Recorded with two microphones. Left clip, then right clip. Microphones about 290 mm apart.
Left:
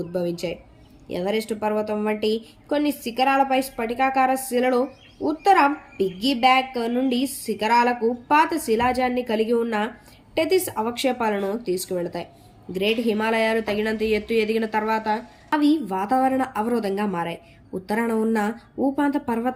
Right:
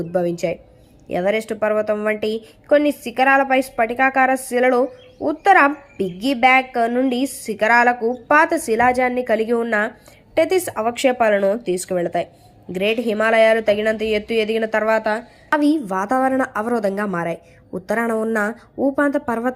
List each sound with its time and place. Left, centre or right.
0.1 s a woman's voice: centre
2.1 s speech: right
2.6 s a woman's voice: centre
18.8 s a woman's voice: centre